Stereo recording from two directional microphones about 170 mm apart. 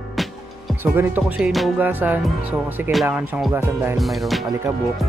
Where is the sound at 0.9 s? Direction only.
10° right (ahead or behind).